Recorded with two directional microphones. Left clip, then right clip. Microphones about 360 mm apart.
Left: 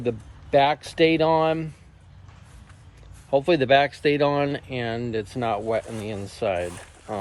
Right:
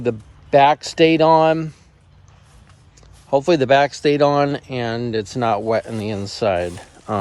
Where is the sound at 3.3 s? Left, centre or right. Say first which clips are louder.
Right 4 dB; right.